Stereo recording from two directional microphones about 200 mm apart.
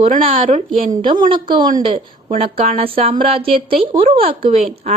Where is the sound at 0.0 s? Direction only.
30° right (ahead or behind).